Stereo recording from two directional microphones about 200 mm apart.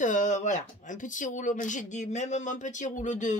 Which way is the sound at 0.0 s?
40° left (ahead or behind).